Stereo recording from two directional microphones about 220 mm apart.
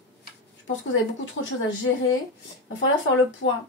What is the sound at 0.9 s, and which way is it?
Speech, 55° left (ahead or behind).